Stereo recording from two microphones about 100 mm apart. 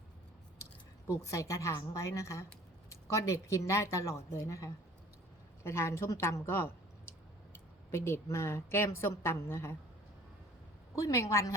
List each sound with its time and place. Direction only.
1.2 s a woman's voice: 30° left (ahead or behind)
11.0 s speech: 35° left (ahead or behind)